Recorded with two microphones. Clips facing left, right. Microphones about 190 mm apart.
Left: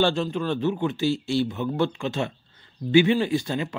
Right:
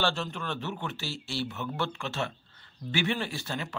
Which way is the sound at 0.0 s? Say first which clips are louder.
Left 8 dB; 15° left (ahead or behind).